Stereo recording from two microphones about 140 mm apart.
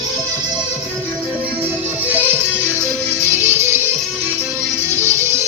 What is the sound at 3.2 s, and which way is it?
Music, 15° right (ahead or behind).